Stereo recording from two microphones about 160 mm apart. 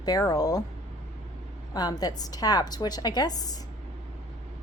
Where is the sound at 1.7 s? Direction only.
25° left (ahead or behind).